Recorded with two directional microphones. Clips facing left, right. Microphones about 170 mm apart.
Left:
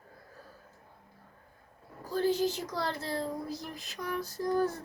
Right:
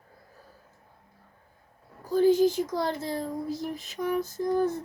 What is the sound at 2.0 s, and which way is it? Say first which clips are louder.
Speech: right 8 dB; 15° right (ahead or behind).